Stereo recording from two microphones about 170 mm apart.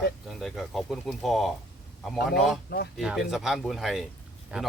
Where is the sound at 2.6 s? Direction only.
70° left (ahead or behind).